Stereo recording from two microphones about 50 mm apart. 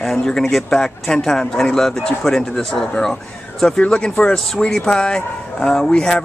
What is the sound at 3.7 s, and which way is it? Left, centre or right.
A man's voice, centre.